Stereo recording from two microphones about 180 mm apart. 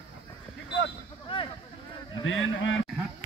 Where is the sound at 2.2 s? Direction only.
90° left.